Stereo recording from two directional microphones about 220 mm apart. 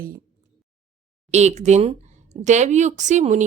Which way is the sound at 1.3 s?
30° right (ahead or behind).